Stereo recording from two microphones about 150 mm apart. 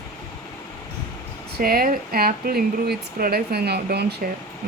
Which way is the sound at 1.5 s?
75° right (ahead or behind).